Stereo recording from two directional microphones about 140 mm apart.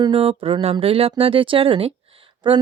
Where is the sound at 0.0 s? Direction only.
45° right (ahead or behind).